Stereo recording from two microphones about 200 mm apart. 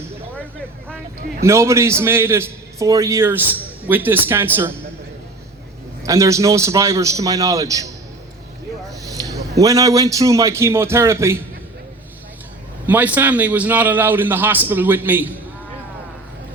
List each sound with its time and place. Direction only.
1.5 s a man's voice: 15° right (ahead or behind)
6.0 s a man's voice: 15° right (ahead or behind)
9.0 s a man's voice: 15° right (ahead or behind)
12.8 s a man's voice: 10° right (ahead or behind)